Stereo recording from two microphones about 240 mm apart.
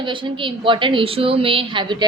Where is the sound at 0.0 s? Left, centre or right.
Right.